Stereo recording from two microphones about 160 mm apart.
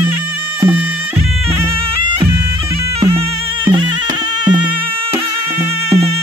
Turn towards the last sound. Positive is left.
turn(degrees=-25)  # may be behind; listen again after turning